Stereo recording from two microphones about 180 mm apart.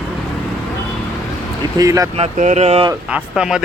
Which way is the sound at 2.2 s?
40° right (ahead or behind).